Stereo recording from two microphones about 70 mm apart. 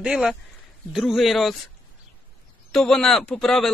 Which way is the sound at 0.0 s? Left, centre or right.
Centre.